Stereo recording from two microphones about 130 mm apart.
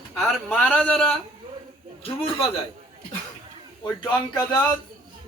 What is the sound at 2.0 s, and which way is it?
Speech, 45° left (ahead or behind).